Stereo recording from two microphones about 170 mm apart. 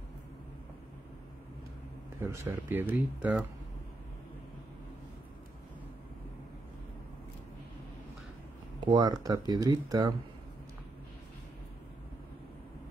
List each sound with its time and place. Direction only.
2.1 s speech: 20° right (ahead or behind)
8.8 s speech: 25° right (ahead or behind)